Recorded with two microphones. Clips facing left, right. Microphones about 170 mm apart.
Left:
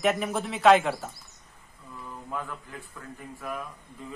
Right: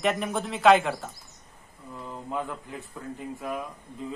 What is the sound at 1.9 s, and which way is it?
Speech, 20° right (ahead or behind).